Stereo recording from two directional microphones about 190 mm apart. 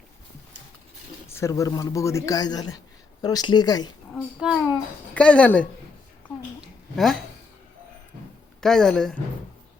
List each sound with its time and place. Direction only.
1.3 s a man's voice: 15° left (ahead or behind)
4.1 s a child's voice: 5° right (ahead or behind)
6.9 s speech: centre (ahead or behind)
8.6 s a child's voice: 5° left (ahead or behind)